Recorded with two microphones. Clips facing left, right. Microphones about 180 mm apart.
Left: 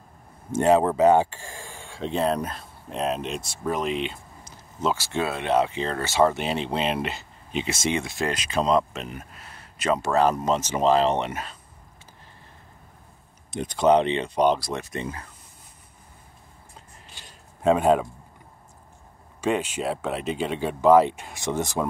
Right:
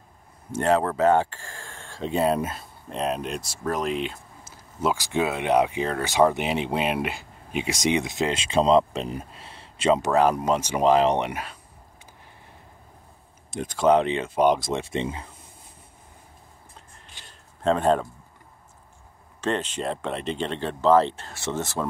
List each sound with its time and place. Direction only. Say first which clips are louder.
0.6 s speech: left 3 dB; 15° left (ahead or behind)
2.0 s speech: right 1 dB; centre (ahead or behind)
13.5 s speech: even; centre (ahead or behind)
14.6 s speech: right 4 dB; 25° right (ahead or behind)
17.6 s speech: left 2 dB; 10° left (ahead or behind)
19.4 s speech: left 2 dB; 10° left (ahead or behind)